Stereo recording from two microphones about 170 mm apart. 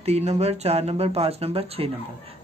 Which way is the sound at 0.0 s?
40° right (ahead or behind).